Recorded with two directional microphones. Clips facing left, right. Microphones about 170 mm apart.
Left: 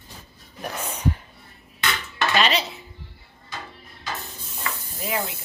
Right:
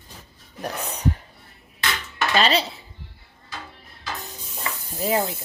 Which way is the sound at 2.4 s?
35° right (ahead or behind).